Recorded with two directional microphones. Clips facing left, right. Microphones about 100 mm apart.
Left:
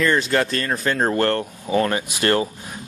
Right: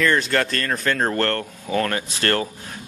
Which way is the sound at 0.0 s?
5° left (ahead or behind).